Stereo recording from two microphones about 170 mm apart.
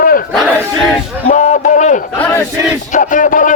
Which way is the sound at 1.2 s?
45° left (ahead or behind).